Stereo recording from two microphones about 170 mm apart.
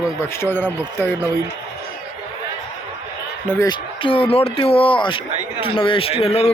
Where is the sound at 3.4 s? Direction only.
10° left (ahead or behind).